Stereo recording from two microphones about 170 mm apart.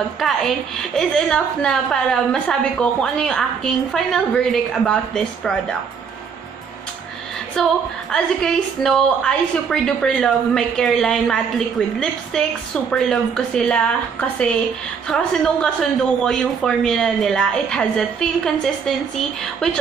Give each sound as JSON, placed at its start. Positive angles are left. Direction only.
{"t": 0.2, "sound": "a woman's voice", "side_deg": 0}
{"t": 7.6, "sound": "a woman's voice", "side_deg": 5}
{"t": 15.0, "sound": "a woman's voice", "side_deg": 5}